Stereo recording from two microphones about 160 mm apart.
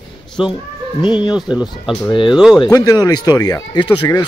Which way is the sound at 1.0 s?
30° left (ahead or behind).